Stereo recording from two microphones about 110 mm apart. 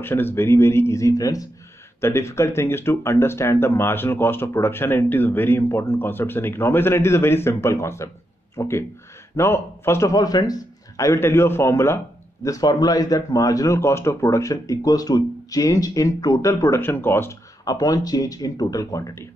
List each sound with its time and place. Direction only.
0.0 s speech: 20° left (ahead or behind)
10.1 s speech: 35° left (ahead or behind)
17.6 s speech: 35° left (ahead or behind)